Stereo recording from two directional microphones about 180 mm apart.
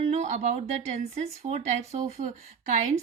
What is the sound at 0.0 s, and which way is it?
Speech, 40° right (ahead or behind).